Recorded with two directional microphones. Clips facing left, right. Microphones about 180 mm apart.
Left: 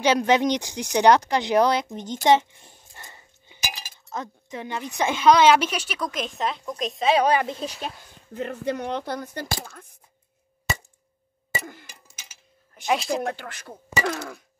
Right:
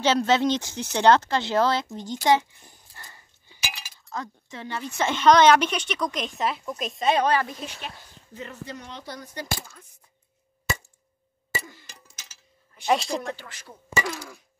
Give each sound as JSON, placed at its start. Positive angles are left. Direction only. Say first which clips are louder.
{"t": 0.0, "sound": "a woman's voice", "louder": "left 1 dB", "side_deg": 15}
{"t": 2.2, "sound": "a sound", "louder": "left 3 dB", "side_deg": 25}
{"t": 3.6, "sound": "chink", "louder": "left 2 dB", "side_deg": 40}
{"t": 3.9, "sound": "a woman's voice", "louder": "right 1 dB", "side_deg": 20}
{"t": 7.2, "sound": "a woman's voice", "louder": "left 2 dB", "side_deg": 15}
{"t": 7.6, "sound": "speech", "louder": "left 5 dB", "side_deg": 40}
{"t": 8.4, "sound": "speech", "louder": "left 10 dB", "side_deg": 60}
{"t": 11.6, "sound": "clock", "louder": "left 6 dB", "side_deg": 55}
{"t": 12.8, "sound": "speech", "louder": "right 1 dB", "side_deg": 0}
{"t": 13.2, "sound": "speech", "louder": "left 5 dB", "side_deg": 55}